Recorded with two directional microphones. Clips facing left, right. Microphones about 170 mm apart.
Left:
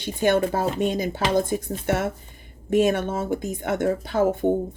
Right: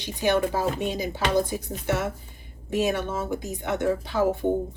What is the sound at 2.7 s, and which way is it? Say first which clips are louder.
A woman's voice: left 5 dB; 50° left (ahead or behind).